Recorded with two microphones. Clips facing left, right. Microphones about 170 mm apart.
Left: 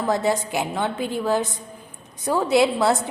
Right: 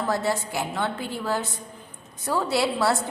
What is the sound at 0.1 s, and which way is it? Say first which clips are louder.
A woman's voice: left 6 dB; 20° left (ahead or behind).